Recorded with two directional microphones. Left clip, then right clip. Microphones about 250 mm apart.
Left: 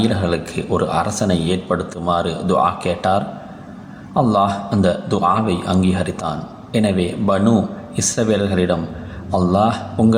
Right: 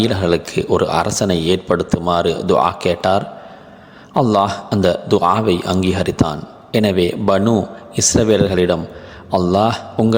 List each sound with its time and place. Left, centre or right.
0.0 s speech: right